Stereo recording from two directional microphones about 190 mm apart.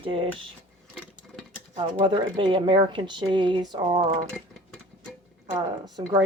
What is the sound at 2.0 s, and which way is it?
Speech, 25° right (ahead or behind).